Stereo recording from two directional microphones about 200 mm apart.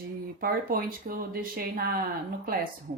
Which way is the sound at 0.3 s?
45° right (ahead or behind).